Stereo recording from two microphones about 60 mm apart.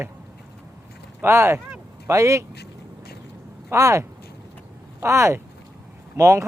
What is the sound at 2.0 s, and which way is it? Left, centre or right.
Speech, right.